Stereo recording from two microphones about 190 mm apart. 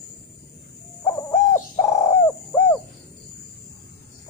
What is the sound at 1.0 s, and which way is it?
Bird, 10° left (ahead or behind).